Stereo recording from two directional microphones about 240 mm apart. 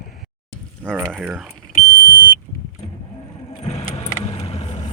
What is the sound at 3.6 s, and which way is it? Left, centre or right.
Keys jangling, left.